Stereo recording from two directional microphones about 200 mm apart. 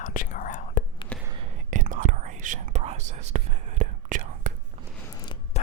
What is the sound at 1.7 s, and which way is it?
Whispering, 40° right (ahead or behind).